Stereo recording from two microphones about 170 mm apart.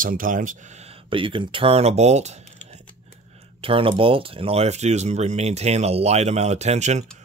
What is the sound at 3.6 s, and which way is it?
Speech, 30° right (ahead or behind).